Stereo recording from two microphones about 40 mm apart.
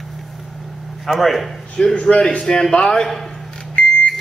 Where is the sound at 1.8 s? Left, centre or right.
Left.